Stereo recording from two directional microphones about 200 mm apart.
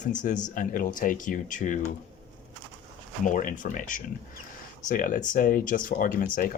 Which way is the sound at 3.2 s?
40° left (ahead or behind).